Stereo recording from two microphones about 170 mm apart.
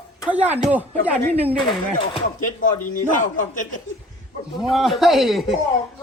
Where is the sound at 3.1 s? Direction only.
50° left (ahead or behind).